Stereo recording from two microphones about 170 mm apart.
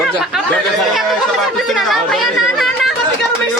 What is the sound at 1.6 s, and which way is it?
Speech, centre (ahead or behind).